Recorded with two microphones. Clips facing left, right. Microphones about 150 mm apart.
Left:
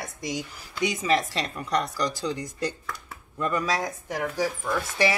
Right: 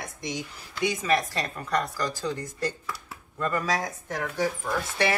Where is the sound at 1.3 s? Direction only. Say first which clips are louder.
Left 1 dB; 15° left (ahead or behind).